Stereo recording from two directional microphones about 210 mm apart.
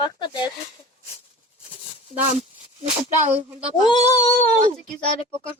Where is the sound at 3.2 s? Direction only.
5° right (ahead or behind).